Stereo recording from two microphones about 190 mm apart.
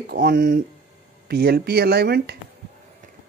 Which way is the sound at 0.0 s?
50° right (ahead or behind).